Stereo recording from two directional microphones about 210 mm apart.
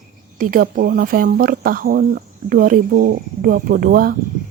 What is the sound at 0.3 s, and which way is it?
A woman's voice, 40° right (ahead or behind).